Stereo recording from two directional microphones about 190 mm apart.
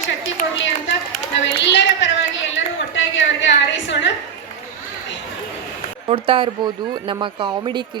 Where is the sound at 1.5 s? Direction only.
70° left (ahead or behind).